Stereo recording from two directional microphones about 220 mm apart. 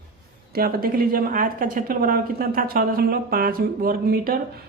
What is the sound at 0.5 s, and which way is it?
A woman's voice, 45° right (ahead or behind).